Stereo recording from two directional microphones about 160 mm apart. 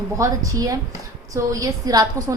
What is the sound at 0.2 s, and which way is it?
A woman's voice, 20° right (ahead or behind).